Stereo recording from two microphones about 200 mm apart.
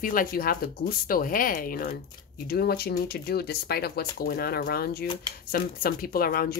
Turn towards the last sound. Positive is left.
turn(degrees=50)  # may be behind; listen again after turning